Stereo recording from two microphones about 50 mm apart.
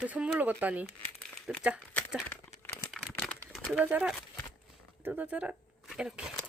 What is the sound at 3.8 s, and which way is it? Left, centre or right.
Speech, right.